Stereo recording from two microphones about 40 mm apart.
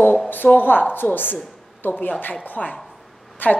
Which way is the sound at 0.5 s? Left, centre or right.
Left.